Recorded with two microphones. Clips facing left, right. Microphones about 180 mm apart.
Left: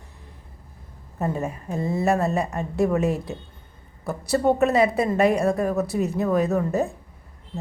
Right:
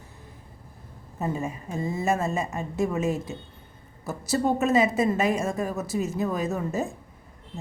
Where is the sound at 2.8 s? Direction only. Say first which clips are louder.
Left 5 dB; 60° left (ahead or behind).